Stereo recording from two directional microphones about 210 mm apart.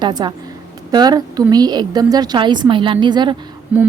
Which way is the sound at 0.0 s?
20° right (ahead or behind).